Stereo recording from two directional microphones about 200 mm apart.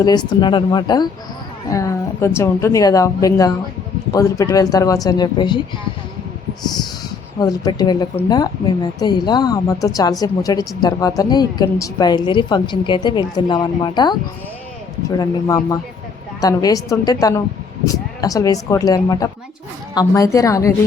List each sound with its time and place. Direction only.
0.0 s a woman's voice: 20° left (ahead or behind)
7.3 s a woman's voice: 20° left (ahead or behind)